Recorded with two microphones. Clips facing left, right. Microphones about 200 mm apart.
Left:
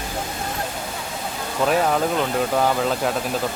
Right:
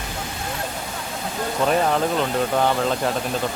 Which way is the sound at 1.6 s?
5° left (ahead or behind).